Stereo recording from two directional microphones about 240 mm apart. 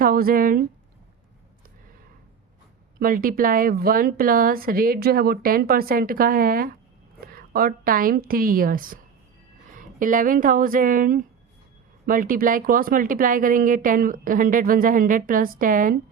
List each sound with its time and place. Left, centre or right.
0.0 s speech: right
3.0 s speech: right